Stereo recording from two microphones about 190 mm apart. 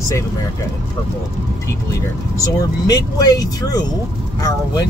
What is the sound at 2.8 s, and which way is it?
Speech, 20° left (ahead or behind).